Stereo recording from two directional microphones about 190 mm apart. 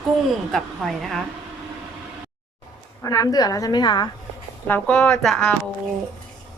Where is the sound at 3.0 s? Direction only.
20° left (ahead or behind).